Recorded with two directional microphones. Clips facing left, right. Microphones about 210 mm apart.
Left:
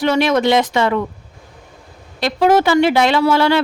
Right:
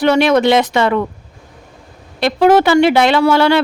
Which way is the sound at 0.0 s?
65° right (ahead or behind).